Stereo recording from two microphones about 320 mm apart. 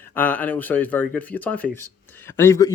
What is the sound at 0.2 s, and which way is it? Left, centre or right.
Speech, centre.